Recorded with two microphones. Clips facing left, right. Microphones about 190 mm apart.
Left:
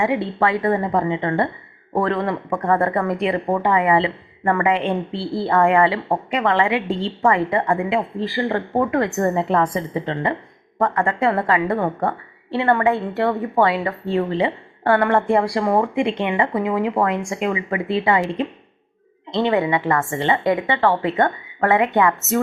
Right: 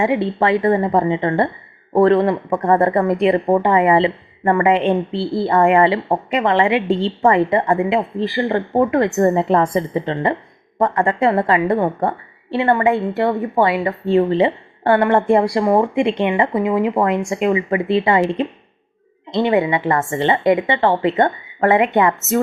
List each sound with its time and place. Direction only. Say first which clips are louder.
0.0 s speech: right 3 dB; 20° right (ahead or behind)